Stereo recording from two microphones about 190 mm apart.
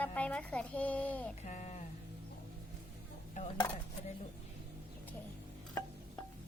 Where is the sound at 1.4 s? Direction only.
40° left (ahead or behind).